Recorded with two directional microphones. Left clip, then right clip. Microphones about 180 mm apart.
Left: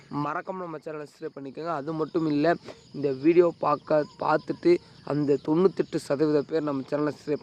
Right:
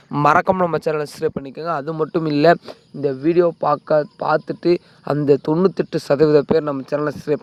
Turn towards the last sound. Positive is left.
turn(degrees=-35)  # may be behind; listen again after turning